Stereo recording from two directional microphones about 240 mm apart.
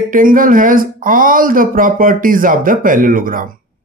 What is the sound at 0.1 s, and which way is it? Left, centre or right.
Speech, right.